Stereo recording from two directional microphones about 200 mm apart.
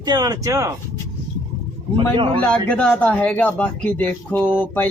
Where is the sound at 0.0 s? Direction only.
20° right (ahead or behind).